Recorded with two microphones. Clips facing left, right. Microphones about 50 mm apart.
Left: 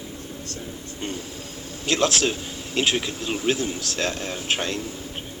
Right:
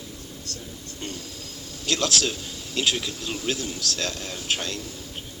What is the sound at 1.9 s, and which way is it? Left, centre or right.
Speech, left.